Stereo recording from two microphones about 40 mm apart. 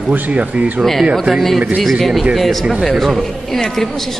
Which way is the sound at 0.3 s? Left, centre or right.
Right.